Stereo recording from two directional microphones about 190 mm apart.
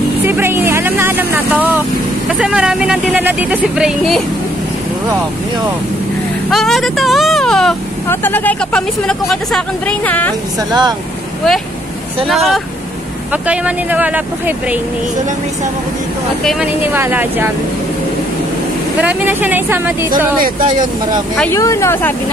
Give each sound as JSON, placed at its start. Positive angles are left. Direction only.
{"t": 0.2, "sound": "vehicle", "side_deg": -10}
{"t": 2.2, "sound": "speech", "side_deg": -5}
{"t": 6.5, "sound": "speech", "side_deg": 0}
{"t": 10.7, "sound": "speech", "side_deg": -20}
{"t": 12.3, "sound": "speech", "side_deg": 0}
{"t": 16.4, "sound": "speech", "side_deg": -5}
{"t": 18.9, "sound": "speech", "side_deg": -10}
{"t": 20.1, "sound": "speech", "side_deg": -45}
{"t": 21.4, "sound": "speech", "side_deg": 15}